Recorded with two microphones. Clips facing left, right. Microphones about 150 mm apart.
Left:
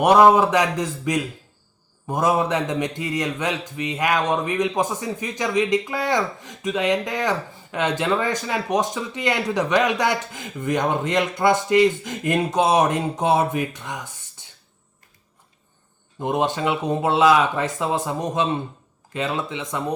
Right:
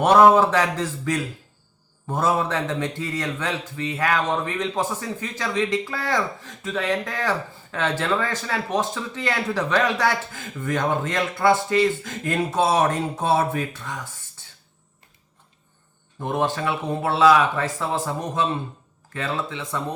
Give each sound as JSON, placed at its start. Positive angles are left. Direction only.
{"t": 0.0, "sound": "a man's voice", "side_deg": 15}
{"t": 16.1, "sound": "speech", "side_deg": 20}